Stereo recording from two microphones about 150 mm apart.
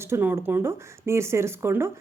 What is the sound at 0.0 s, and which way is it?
Speech, 15° right (ahead or behind).